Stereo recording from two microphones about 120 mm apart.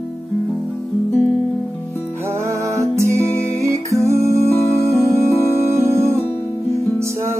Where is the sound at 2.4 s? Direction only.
25° right (ahead or behind).